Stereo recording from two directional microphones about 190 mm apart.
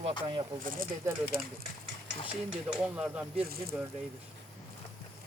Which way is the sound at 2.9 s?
5° right (ahead or behind).